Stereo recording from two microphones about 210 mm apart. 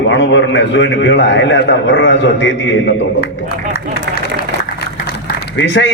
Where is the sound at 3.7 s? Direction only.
45° left (ahead or behind).